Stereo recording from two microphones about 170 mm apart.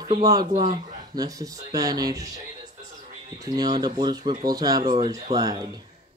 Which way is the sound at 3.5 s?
25° right (ahead or behind).